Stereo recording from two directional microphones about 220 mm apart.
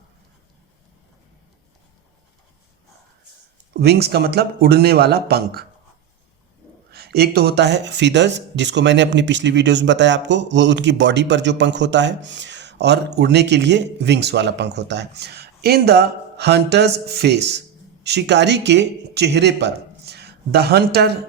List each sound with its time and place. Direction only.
3.8 s speech: 50° right (ahead or behind)
6.9 s speech: 45° right (ahead or behind)